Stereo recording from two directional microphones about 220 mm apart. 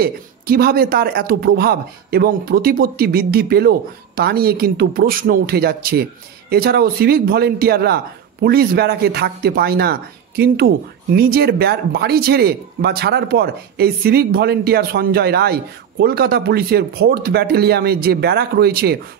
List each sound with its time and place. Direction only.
0.0 s speech: 45° right (ahead or behind)